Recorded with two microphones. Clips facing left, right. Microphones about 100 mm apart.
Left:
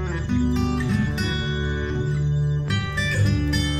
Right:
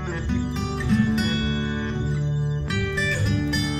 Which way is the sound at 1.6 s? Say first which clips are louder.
Right 1 dB; 15° left (ahead or behind).